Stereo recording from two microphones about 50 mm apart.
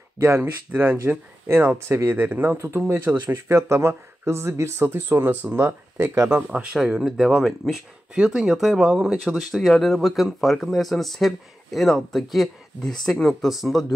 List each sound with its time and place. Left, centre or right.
0.4 s speech: right
1.8 s speech: right
2.0 s speech: right
2.5 s speech: right
5.3 s speech: right
7.0 s speech: centre
8.1 s speech: centre
9.2 s speech: centre
13.4 s speech: centre